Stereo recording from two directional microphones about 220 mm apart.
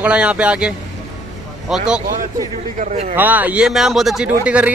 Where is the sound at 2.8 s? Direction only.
35° right (ahead or behind).